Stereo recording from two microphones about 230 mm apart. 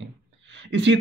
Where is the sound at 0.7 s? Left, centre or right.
Right.